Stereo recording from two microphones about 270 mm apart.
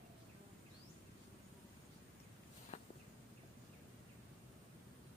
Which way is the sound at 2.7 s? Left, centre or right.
Left.